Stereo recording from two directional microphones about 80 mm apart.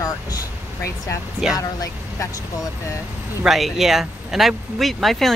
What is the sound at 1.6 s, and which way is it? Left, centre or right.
Speech, left.